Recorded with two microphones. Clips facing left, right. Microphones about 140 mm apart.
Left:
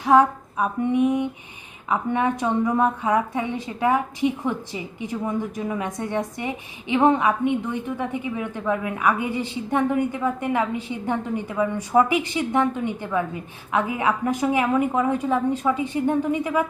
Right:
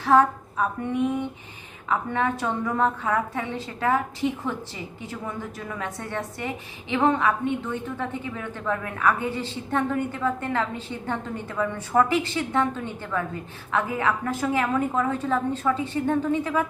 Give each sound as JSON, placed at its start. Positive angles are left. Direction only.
{"t": 0.0, "sound": "a woman's voice", "side_deg": 15}